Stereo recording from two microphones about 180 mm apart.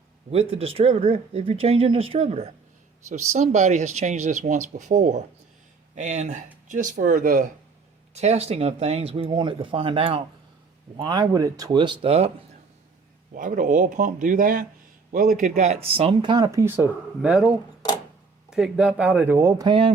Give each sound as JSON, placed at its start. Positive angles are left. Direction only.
{"t": 0.3, "sound": "speech", "side_deg": -35}
{"t": 13.3, "sound": "speech", "side_deg": -45}
{"t": 18.5, "sound": "speech", "side_deg": -5}